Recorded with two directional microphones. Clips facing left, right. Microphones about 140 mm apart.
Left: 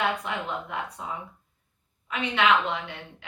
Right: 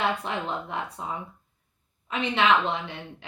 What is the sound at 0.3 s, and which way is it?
A woman's voice, 30° right (ahead or behind).